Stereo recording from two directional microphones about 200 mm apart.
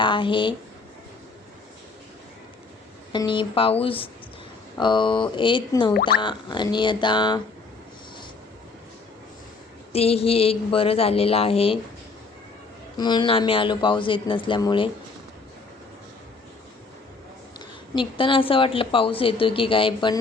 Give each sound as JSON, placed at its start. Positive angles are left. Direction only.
{"t": 0.0, "sound": "speech", "side_deg": 25}
{"t": 3.1, "sound": "a woman's voice", "side_deg": 25}
{"t": 9.9, "sound": "a woman's voice", "side_deg": 30}
{"t": 13.0, "sound": "a woman's voice", "side_deg": 20}
{"t": 17.9, "sound": "a woman's voice", "side_deg": 25}